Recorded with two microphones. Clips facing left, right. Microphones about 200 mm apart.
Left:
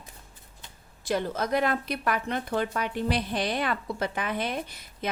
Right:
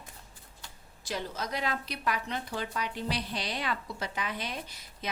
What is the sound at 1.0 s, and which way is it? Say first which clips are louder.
A woman's voice: left 8 dB; 55° left (ahead or behind).